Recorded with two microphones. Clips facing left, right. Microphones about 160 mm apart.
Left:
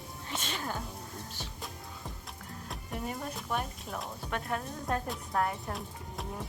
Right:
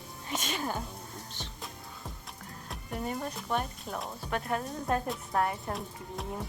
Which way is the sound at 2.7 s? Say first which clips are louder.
Right 3 dB; centre (ahead or behind).